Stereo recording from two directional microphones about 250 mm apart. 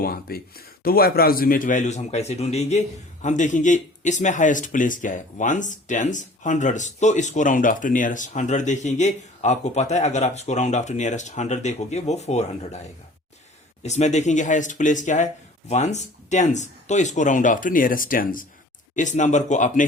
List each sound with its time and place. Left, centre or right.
0.0 s a man's voice: left